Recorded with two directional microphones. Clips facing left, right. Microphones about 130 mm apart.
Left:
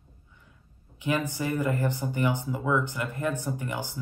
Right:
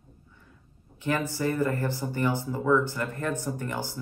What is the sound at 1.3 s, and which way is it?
Speech, 15° left (ahead or behind).